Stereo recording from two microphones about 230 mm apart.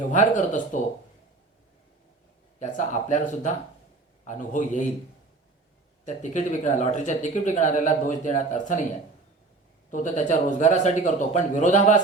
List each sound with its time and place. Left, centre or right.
0.1 s speech: left
2.6 s speech: left
6.1 s speech: left
9.9 s speech: left